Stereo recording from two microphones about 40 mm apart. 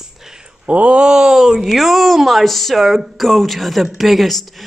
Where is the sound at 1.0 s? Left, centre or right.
Centre.